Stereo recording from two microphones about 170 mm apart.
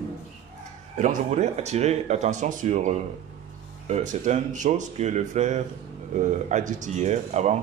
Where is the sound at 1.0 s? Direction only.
45° right (ahead or behind).